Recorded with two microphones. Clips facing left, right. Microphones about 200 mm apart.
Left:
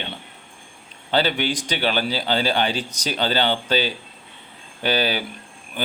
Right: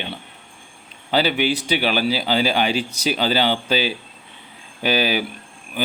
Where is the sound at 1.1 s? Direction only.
10° right (ahead or behind).